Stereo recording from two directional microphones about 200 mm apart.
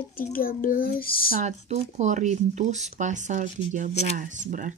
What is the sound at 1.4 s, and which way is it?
Speech, 35° right (ahead or behind).